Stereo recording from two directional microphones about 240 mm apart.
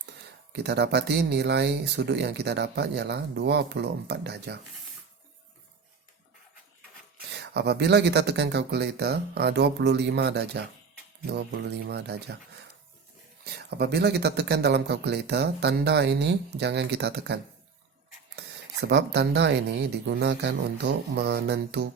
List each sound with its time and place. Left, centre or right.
0.5 s speech: right
7.3 s speech: right
13.4 s speech: right